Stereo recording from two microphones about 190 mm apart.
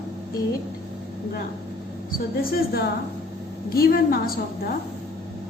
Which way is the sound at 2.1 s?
50° left (ahead or behind).